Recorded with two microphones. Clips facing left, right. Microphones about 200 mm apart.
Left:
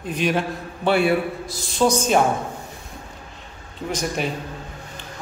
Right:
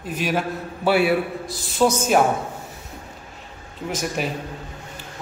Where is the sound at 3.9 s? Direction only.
5° right (ahead or behind).